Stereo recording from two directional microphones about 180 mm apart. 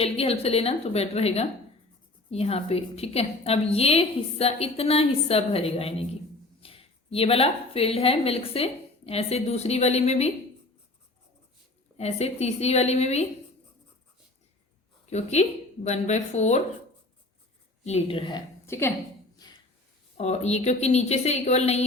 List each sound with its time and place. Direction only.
0.0 s a woman's voice: 35° left (ahead or behind)
11.9 s a woman's voice: 35° left (ahead or behind)
15.0 s a woman's voice: 40° left (ahead or behind)
17.8 s a woman's voice: 35° left (ahead or behind)
18.6 s a woman's voice: 15° left (ahead or behind)
19.4 s a sound: 20° left (ahead or behind)
20.1 s a woman's voice: 35° left (ahead or behind)